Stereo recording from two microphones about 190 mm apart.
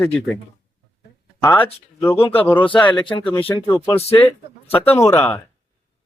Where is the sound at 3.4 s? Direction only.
10° left (ahead or behind).